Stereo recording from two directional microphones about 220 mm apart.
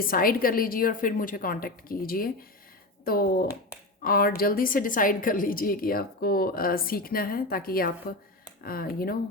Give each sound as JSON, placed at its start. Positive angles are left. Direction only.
{"t": 0.0, "sound": "a woman's voice", "side_deg": 40}